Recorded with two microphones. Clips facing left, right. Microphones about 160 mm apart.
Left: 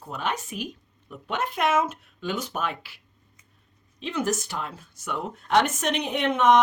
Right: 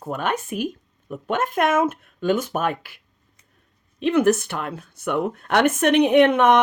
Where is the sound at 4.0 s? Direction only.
60° right (ahead or behind).